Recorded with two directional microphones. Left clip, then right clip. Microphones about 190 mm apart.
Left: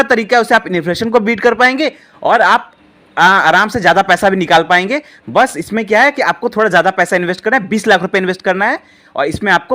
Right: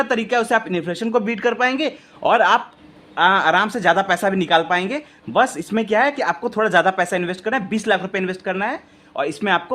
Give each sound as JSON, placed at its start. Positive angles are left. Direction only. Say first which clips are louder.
{"t": 0.0, "sound": "speech", "louder": "left 8 dB", "side_deg": 25}